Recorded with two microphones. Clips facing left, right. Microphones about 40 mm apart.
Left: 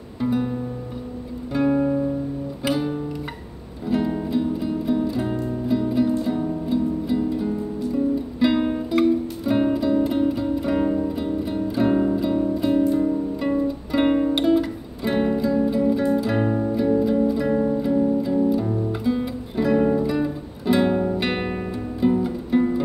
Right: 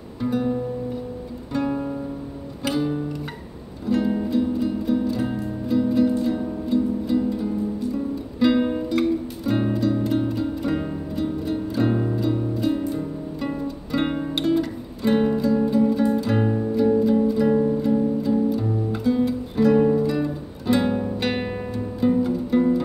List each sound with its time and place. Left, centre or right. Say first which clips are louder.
0.2 s music: even; centre
2.6 s guitar: even; centre
3.8 s music: right 1 dB; centre
16.5 s music: even; centre
16.8 s music: right 2 dB; centre